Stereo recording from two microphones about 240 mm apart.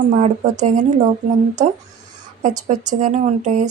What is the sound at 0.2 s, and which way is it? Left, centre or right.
Speech, right.